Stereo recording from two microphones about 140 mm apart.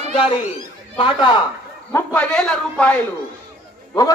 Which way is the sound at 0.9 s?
40° left (ahead or behind).